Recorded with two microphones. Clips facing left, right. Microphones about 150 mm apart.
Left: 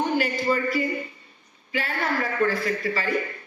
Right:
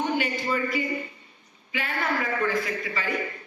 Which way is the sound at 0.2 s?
40° left (ahead or behind).